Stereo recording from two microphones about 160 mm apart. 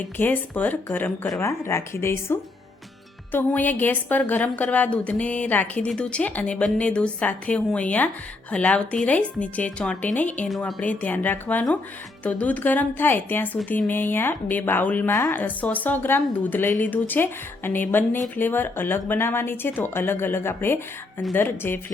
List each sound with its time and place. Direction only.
0.2 s a woman's voice: 10° left (ahead or behind)